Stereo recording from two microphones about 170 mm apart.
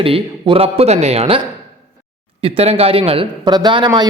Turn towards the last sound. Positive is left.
turn(degrees=-25)  # may be behind; listen again after turning